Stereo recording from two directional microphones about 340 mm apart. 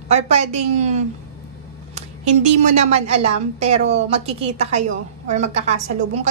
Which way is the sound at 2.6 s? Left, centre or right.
Centre.